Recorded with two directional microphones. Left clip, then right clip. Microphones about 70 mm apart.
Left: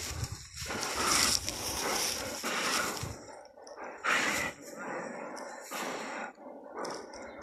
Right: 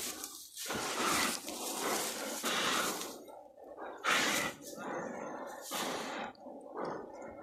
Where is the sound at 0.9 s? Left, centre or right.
Centre.